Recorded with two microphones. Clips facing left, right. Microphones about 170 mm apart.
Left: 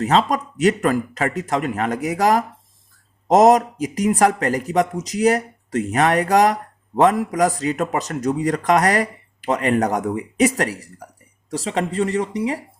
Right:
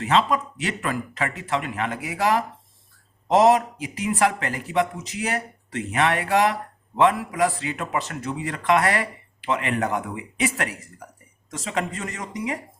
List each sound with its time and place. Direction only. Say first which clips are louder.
0.0 s a man's voice: left 3 dB; 40° left (ahead or behind)